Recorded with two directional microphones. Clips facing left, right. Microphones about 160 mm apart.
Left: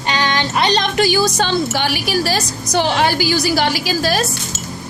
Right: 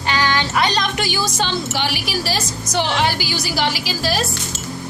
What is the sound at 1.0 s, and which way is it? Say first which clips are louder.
A woman's voice: left 6 dB; 40° left (ahead or behind).